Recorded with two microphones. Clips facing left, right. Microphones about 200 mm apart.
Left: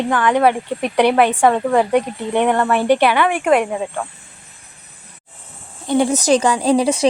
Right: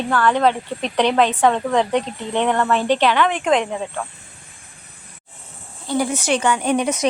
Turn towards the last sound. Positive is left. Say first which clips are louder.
# left 4 dB
turn(degrees=30)  # may be behind; listen again after turning